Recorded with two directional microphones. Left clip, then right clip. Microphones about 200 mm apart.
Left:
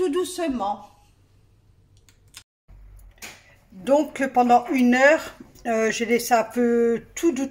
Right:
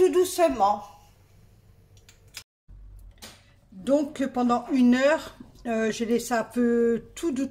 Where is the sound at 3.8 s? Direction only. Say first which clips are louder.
Left 4 dB; 5° left (ahead or behind).